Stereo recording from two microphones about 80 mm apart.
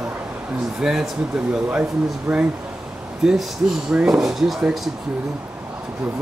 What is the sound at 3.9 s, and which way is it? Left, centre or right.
Speech, centre.